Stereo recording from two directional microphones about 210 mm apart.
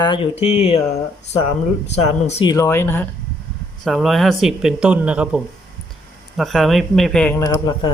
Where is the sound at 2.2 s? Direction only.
25° left (ahead or behind); by 7.3 s 5° left (ahead or behind).